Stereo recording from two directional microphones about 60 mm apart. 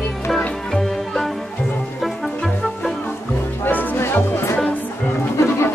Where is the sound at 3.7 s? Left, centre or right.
Left.